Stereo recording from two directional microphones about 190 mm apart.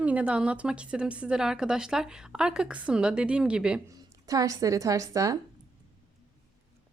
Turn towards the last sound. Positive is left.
turn(degrees=-15)  # may be behind; listen again after turning